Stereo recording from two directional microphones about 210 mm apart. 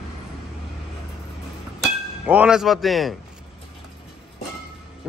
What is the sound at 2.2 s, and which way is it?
Speech, 5° right (ahead or behind).